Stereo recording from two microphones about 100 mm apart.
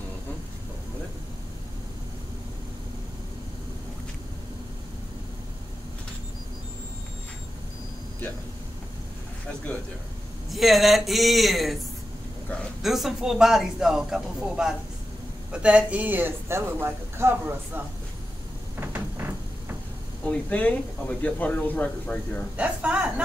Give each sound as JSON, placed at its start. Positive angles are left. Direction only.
{"t": 10.5, "sound": "speech", "side_deg": 0}
{"t": 12.8, "sound": "speech", "side_deg": 0}
{"t": 18.8, "sound": "a sound", "side_deg": -20}
{"t": 20.2, "sound": "speech", "side_deg": 15}
{"t": 22.6, "sound": "a woman's voice", "side_deg": -15}